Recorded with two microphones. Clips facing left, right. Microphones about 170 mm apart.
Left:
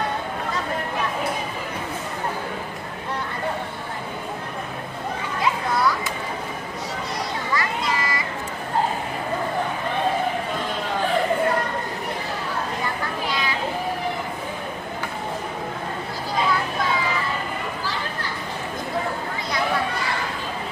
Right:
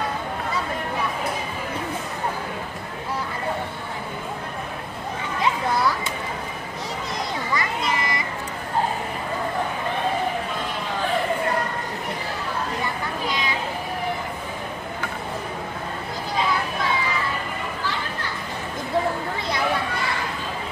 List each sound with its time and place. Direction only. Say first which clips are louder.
7.5 s children playing: left 1 dB; 20° right (ahead or behind)